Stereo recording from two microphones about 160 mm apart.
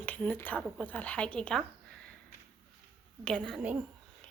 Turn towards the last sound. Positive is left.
turn(degrees=5)  # may be behind; listen again after turning